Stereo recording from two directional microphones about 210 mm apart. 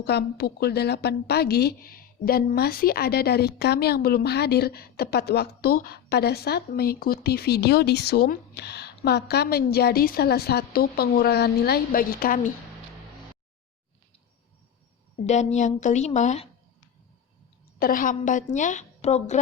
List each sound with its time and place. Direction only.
0.0 s a woman's voice: 50° left (ahead or behind)
15.3 s a woman's voice: 35° left (ahead or behind)
17.7 s a woman's voice: 45° left (ahead or behind)